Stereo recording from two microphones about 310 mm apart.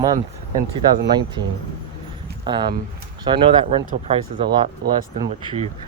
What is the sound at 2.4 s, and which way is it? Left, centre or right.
Speech, centre.